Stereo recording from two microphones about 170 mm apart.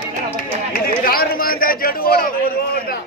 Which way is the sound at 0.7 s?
60° left (ahead or behind).